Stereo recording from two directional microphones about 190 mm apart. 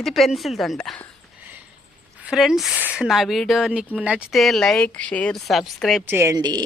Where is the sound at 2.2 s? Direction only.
5° right (ahead or behind).